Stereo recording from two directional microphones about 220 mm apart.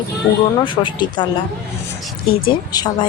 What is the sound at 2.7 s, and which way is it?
Speech, 20° left (ahead or behind).